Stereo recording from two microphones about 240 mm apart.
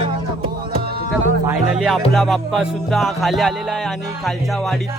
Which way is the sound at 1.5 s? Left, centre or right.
Centre.